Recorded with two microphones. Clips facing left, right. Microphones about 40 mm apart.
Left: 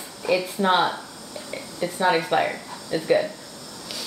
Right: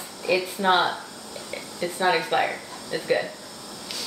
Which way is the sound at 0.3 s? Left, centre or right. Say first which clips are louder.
Left 1 dB; centre.